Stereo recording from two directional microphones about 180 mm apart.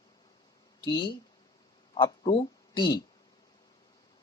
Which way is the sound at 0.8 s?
25° left (ahead or behind).